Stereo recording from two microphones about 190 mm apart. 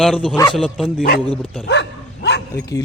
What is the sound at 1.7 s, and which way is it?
Dog, 65° left (ahead or behind).